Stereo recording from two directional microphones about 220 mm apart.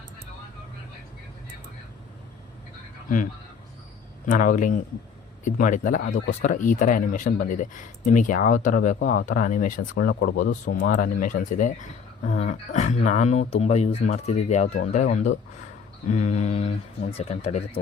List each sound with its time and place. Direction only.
4.3 s speech: 35° left (ahead or behind)